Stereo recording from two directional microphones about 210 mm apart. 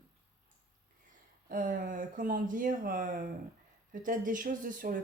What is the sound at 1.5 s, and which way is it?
Speech, 40° right (ahead or behind).